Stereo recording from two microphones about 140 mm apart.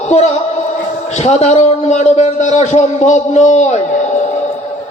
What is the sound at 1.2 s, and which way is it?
A man's voice, 50° left (ahead or behind).